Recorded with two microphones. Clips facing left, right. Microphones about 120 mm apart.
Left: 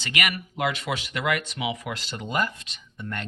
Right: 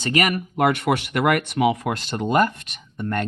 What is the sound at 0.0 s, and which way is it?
Speech, 40° right (ahead or behind).